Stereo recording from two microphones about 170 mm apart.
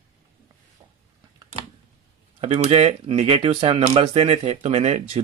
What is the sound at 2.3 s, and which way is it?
Speech, 40° right (ahead or behind).